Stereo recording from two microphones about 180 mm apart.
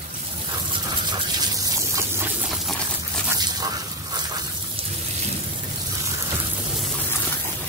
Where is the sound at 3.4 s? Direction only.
20° right (ahead or behind).